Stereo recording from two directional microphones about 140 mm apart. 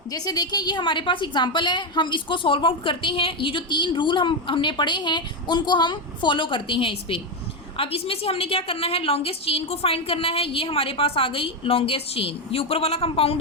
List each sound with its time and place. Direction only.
0.1 s a woman's voice: 25° left (ahead or behind); by 13.4 s 40° left (ahead or behind)